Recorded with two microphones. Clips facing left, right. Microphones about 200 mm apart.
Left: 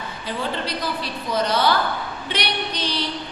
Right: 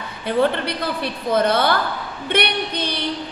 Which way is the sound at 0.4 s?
60° right (ahead or behind).